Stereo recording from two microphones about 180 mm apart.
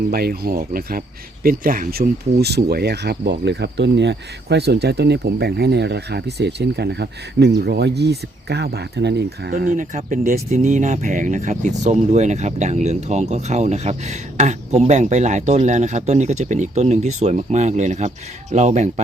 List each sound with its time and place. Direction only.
0.1 s speech: 60° right (ahead or behind); by 19.0 s 40° right (ahead or behind)